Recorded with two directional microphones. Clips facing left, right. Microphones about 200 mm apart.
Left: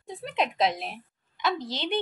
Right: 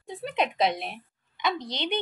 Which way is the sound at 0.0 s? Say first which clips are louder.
Right 1 dB; centre (ahead or behind).